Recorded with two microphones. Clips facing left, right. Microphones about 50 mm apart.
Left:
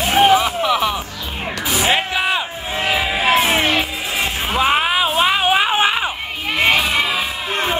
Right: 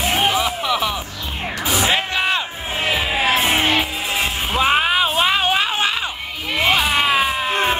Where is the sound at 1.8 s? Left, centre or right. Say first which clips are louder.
Left 3 dB; centre.